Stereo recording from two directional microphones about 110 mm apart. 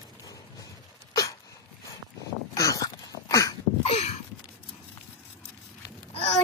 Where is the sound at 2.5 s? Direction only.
30° left (ahead or behind).